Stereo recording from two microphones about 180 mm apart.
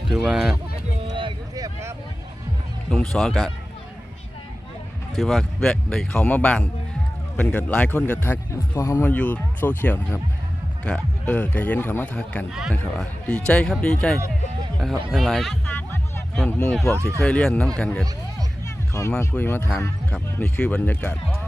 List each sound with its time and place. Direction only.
0.1 s a man's voice: centre (ahead or behind)
1.1 s a sound: 25° right (ahead or behind)
2.9 s a man's voice: centre (ahead or behind)
5.1 s a man's voice: centre (ahead or behind)
15.6 s music: 10° left (ahead or behind)
17.2 s a man's voice: 5° left (ahead or behind)
19.0 s speech: 15° left (ahead or behind)